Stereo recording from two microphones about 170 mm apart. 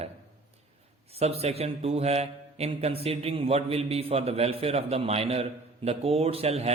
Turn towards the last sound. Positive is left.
turn(degrees=-40)  # may be behind; listen again after turning